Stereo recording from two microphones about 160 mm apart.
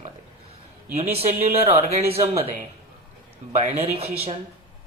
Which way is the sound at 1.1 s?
40° right (ahead or behind).